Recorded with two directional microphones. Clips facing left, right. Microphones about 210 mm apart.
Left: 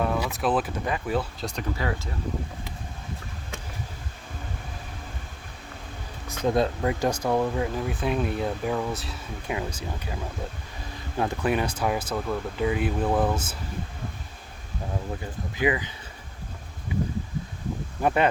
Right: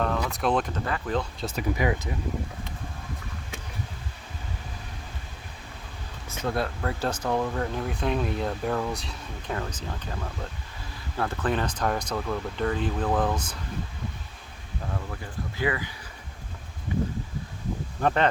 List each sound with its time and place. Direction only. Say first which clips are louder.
0.0 s speech: left 1 dB; 10° left (ahead or behind)
1.7 s speech: right 6 dB; 15° right (ahead or behind)
6.4 s speech: left 5 dB; 15° left (ahead or behind)
11.2 s speech: left 2 dB; 15° left (ahead or behind)
15.1 s speech: left 2 dB; 15° left (ahead or behind)
18.0 s speech: left 1 dB; 10° left (ahead or behind)